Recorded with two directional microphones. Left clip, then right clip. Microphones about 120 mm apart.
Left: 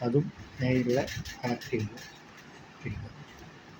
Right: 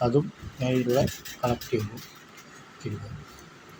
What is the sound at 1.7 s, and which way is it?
Speech, 25° right (ahead or behind).